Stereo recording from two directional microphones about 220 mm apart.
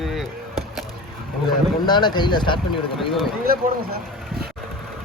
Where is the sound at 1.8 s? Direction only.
20° left (ahead or behind).